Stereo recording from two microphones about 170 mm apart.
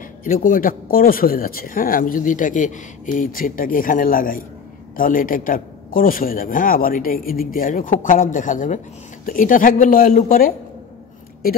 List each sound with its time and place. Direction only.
0.2 s a man's voice: 55° left (ahead or behind)